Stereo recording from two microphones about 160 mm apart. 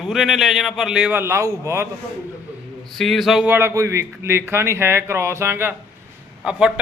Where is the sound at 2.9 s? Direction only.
Centre (ahead or behind).